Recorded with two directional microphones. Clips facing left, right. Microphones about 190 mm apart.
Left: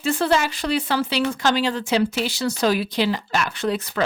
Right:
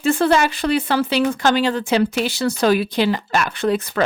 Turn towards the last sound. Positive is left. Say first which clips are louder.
# right 4 dB
turn(degrees=-55)  # may be behind; listen again after turning